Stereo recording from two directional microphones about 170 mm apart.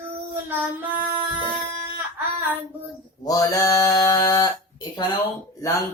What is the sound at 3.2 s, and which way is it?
Speech, 20° left (ahead or behind).